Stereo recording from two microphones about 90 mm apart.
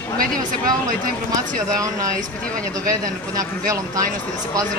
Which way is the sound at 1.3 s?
40° right (ahead or behind).